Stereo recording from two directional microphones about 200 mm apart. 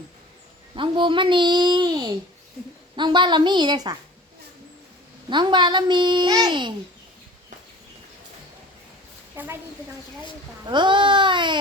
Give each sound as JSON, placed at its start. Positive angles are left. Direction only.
{"t": 0.8, "sound": "a child's voice", "side_deg": -25}
{"t": 5.3, "sound": "a child's voice", "side_deg": -20}
{"t": 9.3, "sound": "a woman's voice", "side_deg": -10}
{"t": 10.7, "sound": "a child's voice", "side_deg": -25}